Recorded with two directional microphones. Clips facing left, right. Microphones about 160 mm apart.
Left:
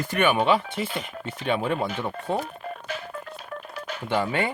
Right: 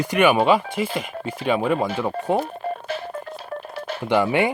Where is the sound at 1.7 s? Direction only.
35° right (ahead or behind).